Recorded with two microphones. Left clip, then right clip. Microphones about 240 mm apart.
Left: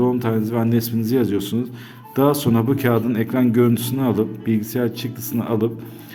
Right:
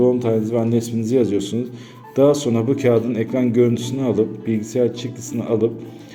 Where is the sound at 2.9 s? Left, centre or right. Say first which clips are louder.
Right 1 dB; left.